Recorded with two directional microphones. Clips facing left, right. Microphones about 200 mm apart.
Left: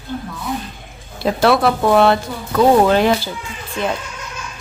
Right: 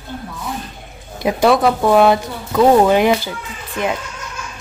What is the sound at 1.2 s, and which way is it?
Speech, 15° right (ahead or behind).